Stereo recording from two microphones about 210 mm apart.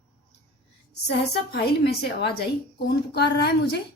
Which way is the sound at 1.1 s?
50° left (ahead or behind).